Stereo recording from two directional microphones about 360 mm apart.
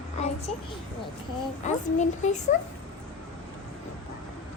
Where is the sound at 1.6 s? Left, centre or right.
Centre.